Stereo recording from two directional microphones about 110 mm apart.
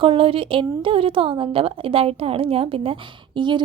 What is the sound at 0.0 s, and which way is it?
A woman's voice, 55° right (ahead or behind).